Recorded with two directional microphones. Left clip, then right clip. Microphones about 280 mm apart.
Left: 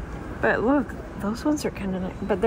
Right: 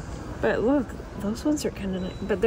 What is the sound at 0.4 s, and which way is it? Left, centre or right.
Speech, centre.